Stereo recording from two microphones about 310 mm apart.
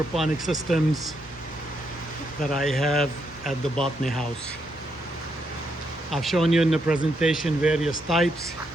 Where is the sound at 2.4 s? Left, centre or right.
Centre.